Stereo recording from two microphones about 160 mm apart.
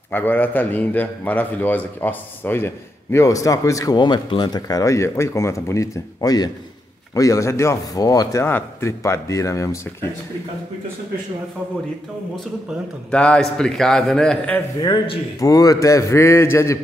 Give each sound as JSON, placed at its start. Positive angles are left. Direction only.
{"t": 0.1, "sound": "a man's voice", "side_deg": 10}
{"t": 13.1, "sound": "a man's voice", "side_deg": 5}
{"t": 14.8, "sound": "speech", "side_deg": 25}